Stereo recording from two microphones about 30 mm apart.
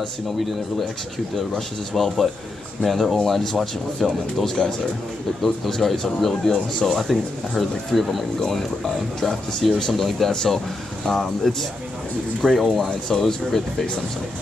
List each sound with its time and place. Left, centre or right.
2.0 s speech: centre
10.0 s speech: centre
10.3 s speech: centre